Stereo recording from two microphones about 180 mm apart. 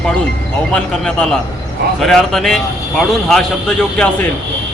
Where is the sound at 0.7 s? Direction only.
5° left (ahead or behind).